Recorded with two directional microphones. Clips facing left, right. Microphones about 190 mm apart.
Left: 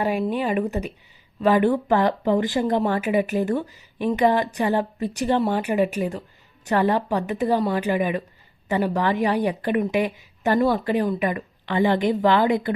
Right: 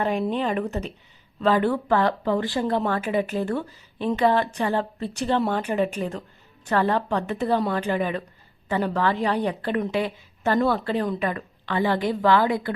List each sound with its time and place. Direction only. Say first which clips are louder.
0.0 s speech: left 1 dB; 10° left (ahead or behind)